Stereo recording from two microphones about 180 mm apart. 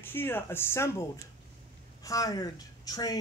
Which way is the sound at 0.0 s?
10° left (ahead or behind).